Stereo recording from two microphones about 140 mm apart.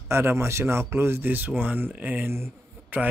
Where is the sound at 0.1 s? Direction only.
15° right (ahead or behind).